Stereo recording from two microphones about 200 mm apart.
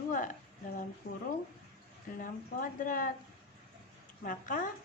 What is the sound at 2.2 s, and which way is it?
Speech, 40° left (ahead or behind).